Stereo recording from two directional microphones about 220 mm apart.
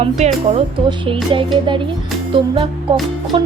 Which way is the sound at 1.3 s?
20° right (ahead or behind).